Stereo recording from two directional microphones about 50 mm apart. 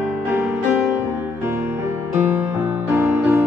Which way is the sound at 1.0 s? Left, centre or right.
Right.